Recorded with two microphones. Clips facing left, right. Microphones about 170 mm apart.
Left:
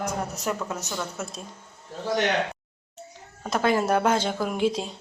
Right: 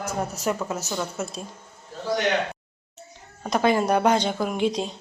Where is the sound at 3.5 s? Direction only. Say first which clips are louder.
Right 2 dB; 5° left (ahead or behind).